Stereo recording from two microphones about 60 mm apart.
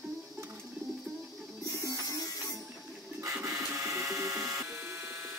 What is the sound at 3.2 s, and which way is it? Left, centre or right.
Printer, right.